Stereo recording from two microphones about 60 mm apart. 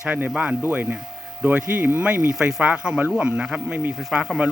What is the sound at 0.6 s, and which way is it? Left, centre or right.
A man's voice, right.